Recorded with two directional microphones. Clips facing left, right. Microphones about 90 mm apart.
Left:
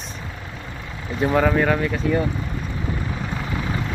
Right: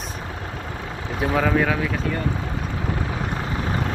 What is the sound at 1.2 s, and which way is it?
Speech, centre (ahead or behind).